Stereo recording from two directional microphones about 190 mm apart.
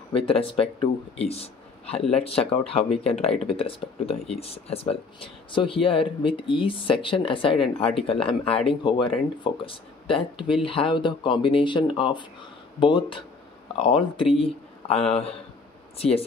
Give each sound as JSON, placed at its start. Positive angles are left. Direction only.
{"t": 0.1, "sound": "speech", "side_deg": 30}